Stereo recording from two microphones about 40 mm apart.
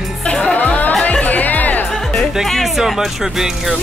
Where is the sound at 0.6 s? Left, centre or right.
Left.